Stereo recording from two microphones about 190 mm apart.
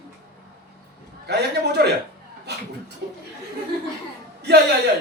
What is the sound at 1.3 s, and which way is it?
Speech, 60° right (ahead or behind).